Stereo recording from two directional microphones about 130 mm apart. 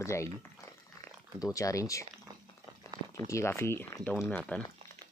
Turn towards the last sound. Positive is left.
turn(degrees=10)  # may be behind; listen again after turning